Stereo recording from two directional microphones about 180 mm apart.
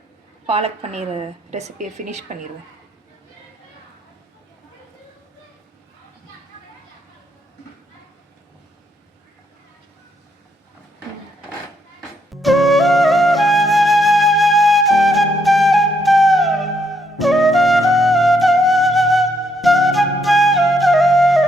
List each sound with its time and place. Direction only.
0.4 s a woman's voice: 35° right (ahead or behind)
12.3 s flute: centre (ahead or behind)